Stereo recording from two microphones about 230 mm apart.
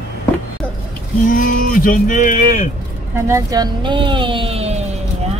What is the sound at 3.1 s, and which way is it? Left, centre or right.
Speech, centre.